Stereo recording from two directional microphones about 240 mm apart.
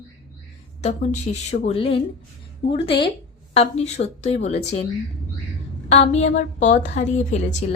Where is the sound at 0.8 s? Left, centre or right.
Left.